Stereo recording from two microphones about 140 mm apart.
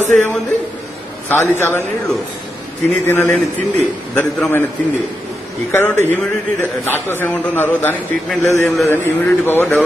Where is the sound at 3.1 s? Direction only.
15° left (ahead or behind).